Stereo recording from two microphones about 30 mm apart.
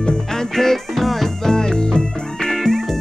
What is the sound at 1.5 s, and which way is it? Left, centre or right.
Music, left.